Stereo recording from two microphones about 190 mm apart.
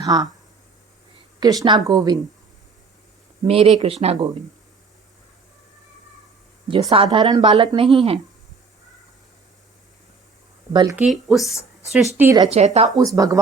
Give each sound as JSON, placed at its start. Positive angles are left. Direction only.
{"t": 0.0, "sound": "speech", "side_deg": -20}
{"t": 1.4, "sound": "a woman's voice", "side_deg": -20}
{"t": 3.4, "sound": "speech", "side_deg": -30}
{"t": 6.9, "sound": "a woman's voice", "side_deg": -30}
{"t": 10.7, "sound": "speech", "side_deg": -20}
{"t": 10.9, "sound": "speech", "side_deg": -5}
{"t": 12.5, "sound": "speech", "side_deg": -35}
{"t": 12.9, "sound": "speech", "side_deg": -20}